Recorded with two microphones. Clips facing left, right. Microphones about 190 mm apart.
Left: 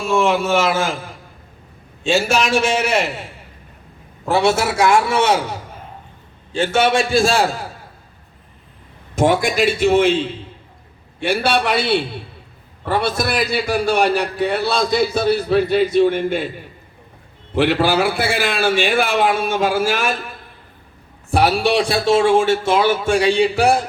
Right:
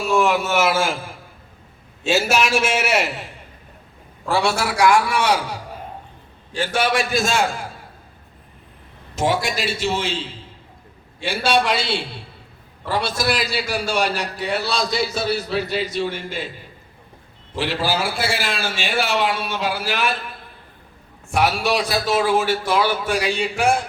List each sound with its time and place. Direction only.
0.0 s a man's voice: centre (ahead or behind)
4.3 s a man's voice: 20° left (ahead or behind)
9.1 s a man's voice: 50° left (ahead or behind)
17.5 s a man's voice: 60° left (ahead or behind)
21.2 s a man's voice: 35° left (ahead or behind)